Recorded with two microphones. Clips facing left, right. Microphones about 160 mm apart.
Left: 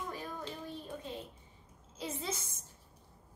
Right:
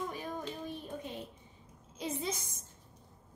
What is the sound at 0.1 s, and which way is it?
Child singing, 20° right (ahead or behind).